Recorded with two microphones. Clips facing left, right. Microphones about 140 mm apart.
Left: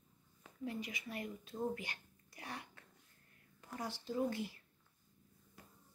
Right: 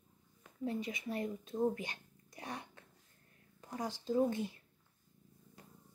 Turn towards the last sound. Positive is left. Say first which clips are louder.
# right 5 dB
turn(degrees=-20)  # may be behind; listen again after turning